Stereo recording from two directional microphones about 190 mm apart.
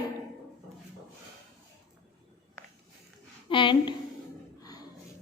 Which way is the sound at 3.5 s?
25° left (ahead or behind).